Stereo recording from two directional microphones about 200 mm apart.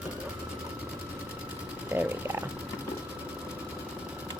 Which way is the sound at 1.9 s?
10° right (ahead or behind).